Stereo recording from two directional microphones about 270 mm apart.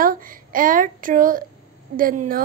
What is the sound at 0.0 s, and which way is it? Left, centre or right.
A child's voice, right.